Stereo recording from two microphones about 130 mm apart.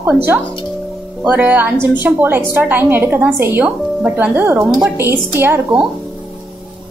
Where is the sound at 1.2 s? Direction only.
10° right (ahead or behind).